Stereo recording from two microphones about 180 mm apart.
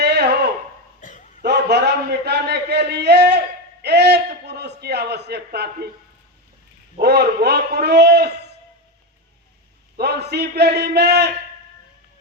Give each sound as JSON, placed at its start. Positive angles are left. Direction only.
{"t": 0.0, "sound": "a sound", "side_deg": -65}
{"t": 1.4, "sound": "a man's voice", "side_deg": -65}
{"t": 7.0, "sound": "a man's voice", "side_deg": -65}
{"t": 10.0, "sound": "a man's voice", "side_deg": -65}